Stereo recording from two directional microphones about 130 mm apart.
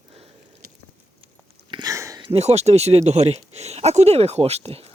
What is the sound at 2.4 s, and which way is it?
Speech, 55° right (ahead or behind).